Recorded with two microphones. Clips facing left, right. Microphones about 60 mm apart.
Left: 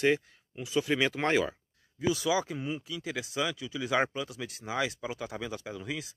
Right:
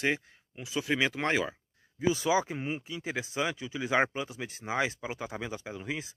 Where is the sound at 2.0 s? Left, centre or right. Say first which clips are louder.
Right 1 dB; right.